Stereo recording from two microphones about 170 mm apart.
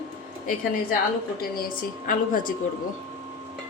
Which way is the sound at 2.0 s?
50° left (ahead or behind).